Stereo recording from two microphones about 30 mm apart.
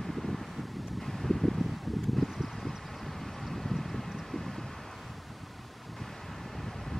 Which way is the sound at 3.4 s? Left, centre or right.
Centre.